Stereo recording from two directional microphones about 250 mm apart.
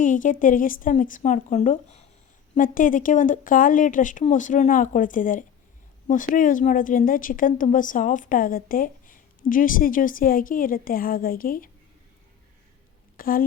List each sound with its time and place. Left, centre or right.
0.0 s a woman's voice: left
13.1 s speech: left